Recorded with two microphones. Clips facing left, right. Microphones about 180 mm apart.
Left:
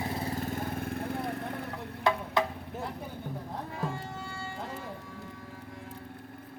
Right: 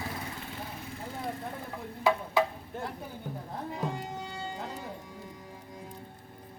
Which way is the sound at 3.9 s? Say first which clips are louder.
Right 1 dB; 20° right (ahead or behind).